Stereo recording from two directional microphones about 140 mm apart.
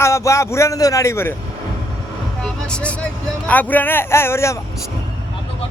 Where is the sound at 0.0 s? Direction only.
20° left (ahead or behind).